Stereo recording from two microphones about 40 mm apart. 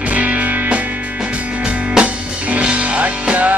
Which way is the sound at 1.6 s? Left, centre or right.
Right.